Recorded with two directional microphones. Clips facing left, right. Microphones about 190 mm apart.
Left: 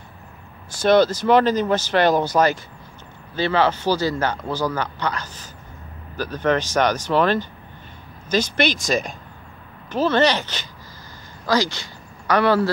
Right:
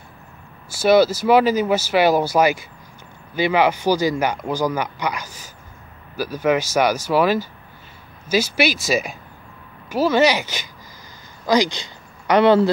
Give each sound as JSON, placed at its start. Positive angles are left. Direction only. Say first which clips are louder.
{"t": 0.7, "sound": "speech", "louder": "right 1 dB", "side_deg": -5}